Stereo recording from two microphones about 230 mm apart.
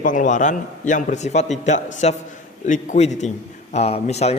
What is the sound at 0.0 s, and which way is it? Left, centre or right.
A man's voice, left.